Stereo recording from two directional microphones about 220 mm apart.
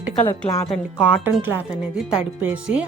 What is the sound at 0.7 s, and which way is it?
Speech, 5° right (ahead or behind).